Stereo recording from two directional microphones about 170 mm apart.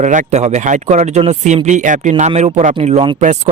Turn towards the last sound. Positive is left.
turn(degrees=-35)  # may be behind; listen again after turning